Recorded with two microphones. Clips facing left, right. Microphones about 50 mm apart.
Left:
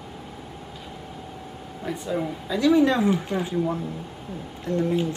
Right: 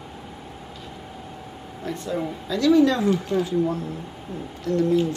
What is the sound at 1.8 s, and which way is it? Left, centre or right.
Speech, centre.